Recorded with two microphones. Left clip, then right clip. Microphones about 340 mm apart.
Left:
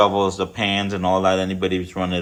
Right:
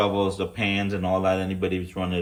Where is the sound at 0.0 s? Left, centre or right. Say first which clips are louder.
Left 6 dB; centre.